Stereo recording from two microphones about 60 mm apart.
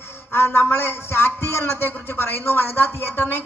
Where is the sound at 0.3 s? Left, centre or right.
Left.